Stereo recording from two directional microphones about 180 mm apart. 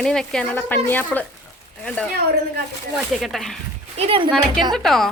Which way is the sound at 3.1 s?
Centre (ahead or behind).